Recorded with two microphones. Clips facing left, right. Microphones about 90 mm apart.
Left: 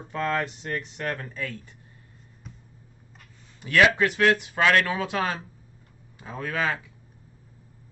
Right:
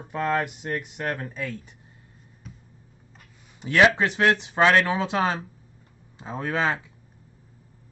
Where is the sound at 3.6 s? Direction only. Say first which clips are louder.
Right 1 dB; 20° right (ahead or behind).